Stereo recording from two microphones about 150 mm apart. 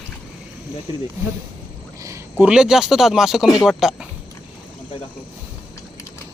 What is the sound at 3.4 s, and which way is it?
Speech, 25° left (ahead or behind).